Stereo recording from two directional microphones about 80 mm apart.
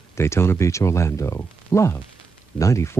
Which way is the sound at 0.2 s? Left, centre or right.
Left.